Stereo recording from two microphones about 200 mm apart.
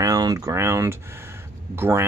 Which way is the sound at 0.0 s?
20° right (ahead or behind).